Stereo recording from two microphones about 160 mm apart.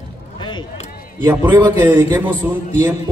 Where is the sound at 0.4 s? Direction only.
30° left (ahead or behind).